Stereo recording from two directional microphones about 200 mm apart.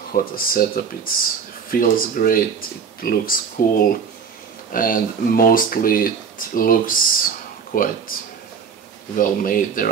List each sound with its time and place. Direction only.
0.1 s speech: 45° left (ahead or behind)
9.1 s speech: 45° left (ahead or behind)